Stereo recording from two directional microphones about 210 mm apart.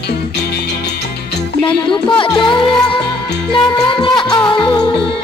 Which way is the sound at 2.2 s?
20° left (ahead or behind).